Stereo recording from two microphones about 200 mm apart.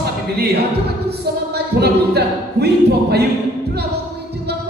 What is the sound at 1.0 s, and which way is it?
Music, 55° right (ahead or behind).